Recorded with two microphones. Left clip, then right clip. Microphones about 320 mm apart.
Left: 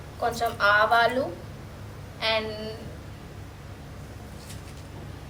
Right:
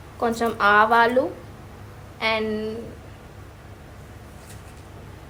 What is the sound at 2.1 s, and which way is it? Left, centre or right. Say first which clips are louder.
Speech: right 2 dB; right.